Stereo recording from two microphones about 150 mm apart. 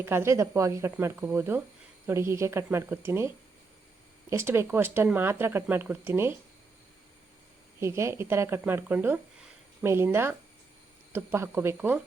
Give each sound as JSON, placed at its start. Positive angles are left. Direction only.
{"t": 0.0, "sound": "speech", "side_deg": -15}
{"t": 7.8, "sound": "speech", "side_deg": -20}